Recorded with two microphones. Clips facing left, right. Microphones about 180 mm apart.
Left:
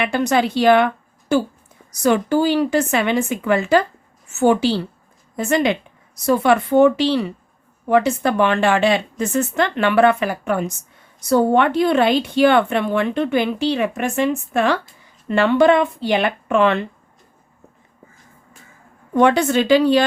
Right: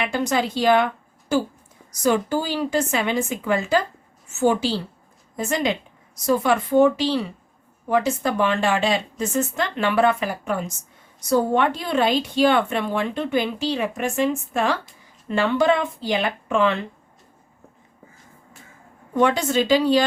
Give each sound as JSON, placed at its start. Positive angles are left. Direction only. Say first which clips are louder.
{"t": 0.0, "sound": "speech", "louder": "left 4 dB", "side_deg": 70}
{"t": 19.2, "sound": "speech", "louder": "left 4 dB", "side_deg": 65}